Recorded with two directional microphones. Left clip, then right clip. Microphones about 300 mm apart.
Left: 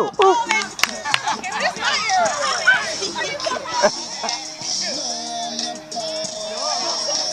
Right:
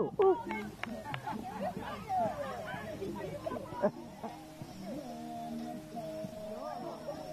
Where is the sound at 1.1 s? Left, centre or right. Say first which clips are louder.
Left 19 dB; centre.